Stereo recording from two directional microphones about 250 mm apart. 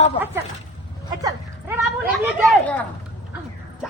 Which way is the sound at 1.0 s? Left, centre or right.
Centre.